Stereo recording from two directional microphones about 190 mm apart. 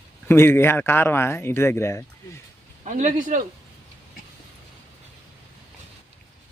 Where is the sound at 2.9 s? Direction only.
40° right (ahead or behind).